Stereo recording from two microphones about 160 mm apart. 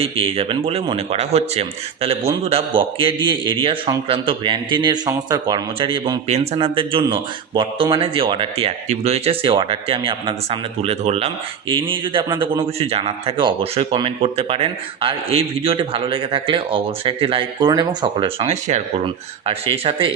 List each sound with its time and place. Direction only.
0.0 s a man's voice: 35° right (ahead or behind)